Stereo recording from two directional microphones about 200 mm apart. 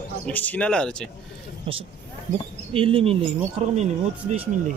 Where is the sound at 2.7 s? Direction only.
25° right (ahead or behind).